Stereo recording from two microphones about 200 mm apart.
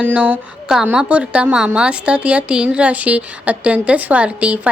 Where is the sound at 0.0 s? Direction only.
10° right (ahead or behind).